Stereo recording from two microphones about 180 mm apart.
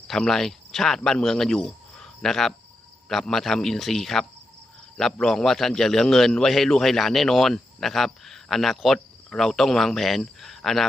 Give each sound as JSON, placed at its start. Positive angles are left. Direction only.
{"t": 0.1, "sound": "a man's voice", "side_deg": 0}